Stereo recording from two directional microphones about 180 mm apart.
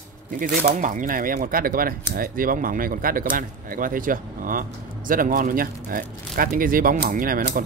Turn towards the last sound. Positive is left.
turn(degrees=-50)  # may be behind; listen again after turning